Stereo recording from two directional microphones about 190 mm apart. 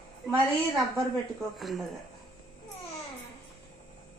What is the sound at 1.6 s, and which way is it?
Speech, centre (ahead or behind).